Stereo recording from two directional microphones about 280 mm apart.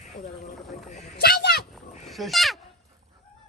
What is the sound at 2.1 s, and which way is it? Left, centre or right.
Speech, centre.